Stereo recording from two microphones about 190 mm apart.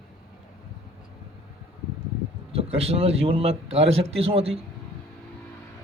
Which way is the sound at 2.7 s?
30° right (ahead or behind).